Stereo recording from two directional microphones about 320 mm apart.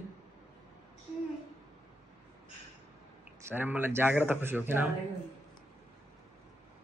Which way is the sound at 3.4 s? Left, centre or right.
Centre.